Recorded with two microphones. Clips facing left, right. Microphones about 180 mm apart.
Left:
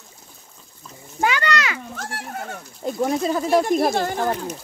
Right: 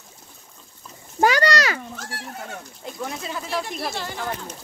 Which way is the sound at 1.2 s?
40° right (ahead or behind).